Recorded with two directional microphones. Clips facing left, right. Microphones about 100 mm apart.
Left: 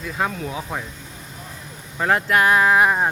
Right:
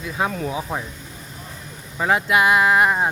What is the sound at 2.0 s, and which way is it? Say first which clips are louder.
Speech: even; 5° right (ahead or behind).